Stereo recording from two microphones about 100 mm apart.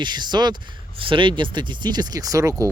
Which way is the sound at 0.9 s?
60° right (ahead or behind).